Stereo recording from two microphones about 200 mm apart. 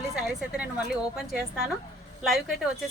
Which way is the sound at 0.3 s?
5° right (ahead or behind).